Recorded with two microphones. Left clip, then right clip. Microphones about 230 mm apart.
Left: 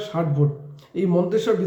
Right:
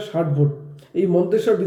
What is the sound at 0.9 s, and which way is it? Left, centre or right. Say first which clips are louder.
Speech: right 3 dB; left.